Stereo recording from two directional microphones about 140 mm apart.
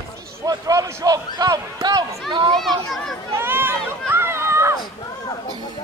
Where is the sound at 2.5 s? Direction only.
Centre (ahead or behind).